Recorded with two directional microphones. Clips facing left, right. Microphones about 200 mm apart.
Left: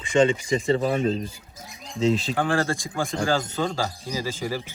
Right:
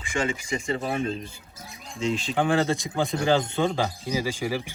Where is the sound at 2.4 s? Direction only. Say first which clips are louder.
Right 1 dB; 20° right (ahead or behind).